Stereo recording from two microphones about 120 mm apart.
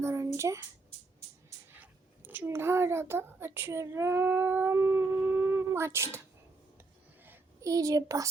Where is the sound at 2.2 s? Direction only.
15° right (ahead or behind).